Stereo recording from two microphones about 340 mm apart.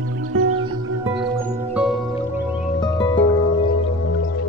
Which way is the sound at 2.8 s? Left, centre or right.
Centre.